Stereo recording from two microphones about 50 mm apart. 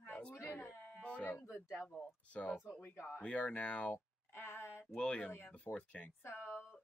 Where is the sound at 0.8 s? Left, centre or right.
Left.